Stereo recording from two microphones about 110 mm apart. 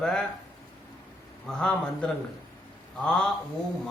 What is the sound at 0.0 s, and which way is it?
Speech, 5° left (ahead or behind).